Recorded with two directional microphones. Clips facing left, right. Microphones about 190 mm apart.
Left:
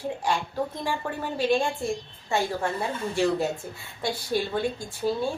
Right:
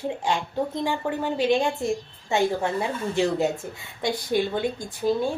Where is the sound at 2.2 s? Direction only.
20° right (ahead or behind).